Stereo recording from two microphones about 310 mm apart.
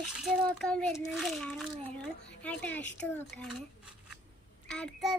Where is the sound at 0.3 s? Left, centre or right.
Centre.